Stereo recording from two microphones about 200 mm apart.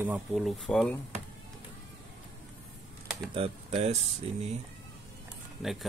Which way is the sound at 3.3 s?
30° right (ahead or behind).